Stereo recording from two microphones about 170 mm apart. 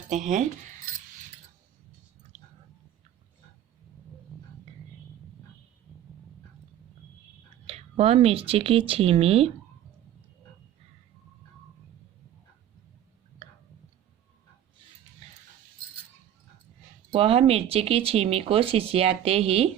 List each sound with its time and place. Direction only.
0.1 s speech: 45° right (ahead or behind)
7.7 s speech: 35° right (ahead or behind)
13.4 s a sound: 35° right (ahead or behind)
17.1 s speech: 35° right (ahead or behind)